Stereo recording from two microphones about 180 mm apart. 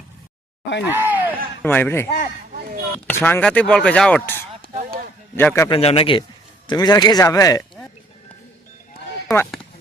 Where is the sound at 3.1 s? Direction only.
10° left (ahead or behind).